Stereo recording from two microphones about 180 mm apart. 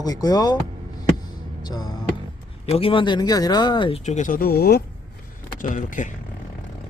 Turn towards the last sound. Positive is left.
turn(degrees=45)  # may be behind; listen again after turning